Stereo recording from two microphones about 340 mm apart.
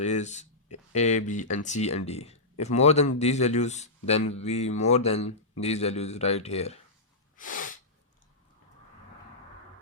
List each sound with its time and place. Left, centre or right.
0.0 s speech: left
7.3 s sneeze: left